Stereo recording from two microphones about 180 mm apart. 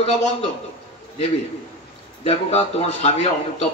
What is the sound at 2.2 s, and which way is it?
Speech, 35° left (ahead or behind).